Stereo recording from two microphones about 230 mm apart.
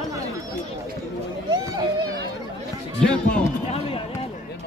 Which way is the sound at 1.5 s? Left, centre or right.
Centre.